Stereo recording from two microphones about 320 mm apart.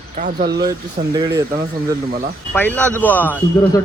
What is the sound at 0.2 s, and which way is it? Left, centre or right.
Speech, right.